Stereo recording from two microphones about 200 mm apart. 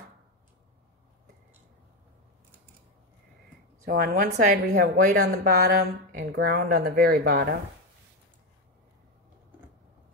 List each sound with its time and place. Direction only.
3.8 s a woman's voice: 45° right (ahead or behind)